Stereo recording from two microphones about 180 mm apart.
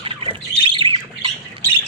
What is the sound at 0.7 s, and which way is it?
Squawk, 30° right (ahead or behind).